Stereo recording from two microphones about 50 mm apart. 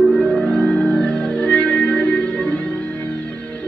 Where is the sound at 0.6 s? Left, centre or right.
Left.